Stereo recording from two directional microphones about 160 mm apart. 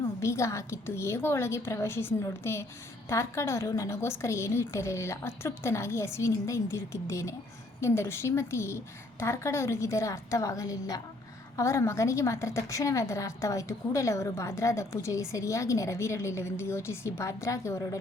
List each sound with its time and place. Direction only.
0.2 s a woman's voice: 20° left (ahead or behind)